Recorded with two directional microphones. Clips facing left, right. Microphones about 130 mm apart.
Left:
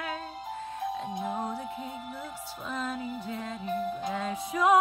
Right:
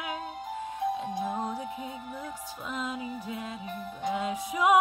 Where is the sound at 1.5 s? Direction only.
15° right (ahead or behind).